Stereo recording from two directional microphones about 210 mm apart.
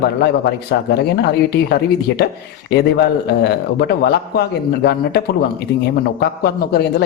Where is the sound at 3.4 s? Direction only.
50° left (ahead or behind).